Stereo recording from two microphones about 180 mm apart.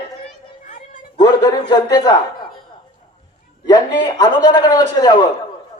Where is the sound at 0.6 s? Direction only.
45° left (ahead or behind).